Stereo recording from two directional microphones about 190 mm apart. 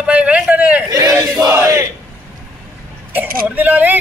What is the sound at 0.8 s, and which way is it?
Battle cry, 20° right (ahead or behind).